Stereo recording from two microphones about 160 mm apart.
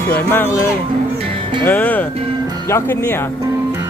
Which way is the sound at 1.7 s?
10° left (ahead or behind).